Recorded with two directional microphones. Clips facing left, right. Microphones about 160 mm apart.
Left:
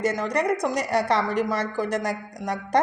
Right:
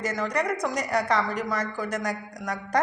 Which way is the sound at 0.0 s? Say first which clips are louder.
Left 3 dB; 25° left (ahead or behind).